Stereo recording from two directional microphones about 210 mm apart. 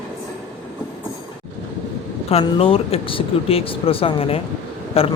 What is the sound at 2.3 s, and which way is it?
Speech, 30° left (ahead or behind).